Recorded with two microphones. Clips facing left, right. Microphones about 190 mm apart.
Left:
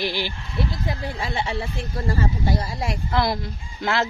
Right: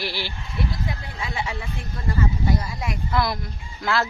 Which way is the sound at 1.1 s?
30° left (ahead or behind).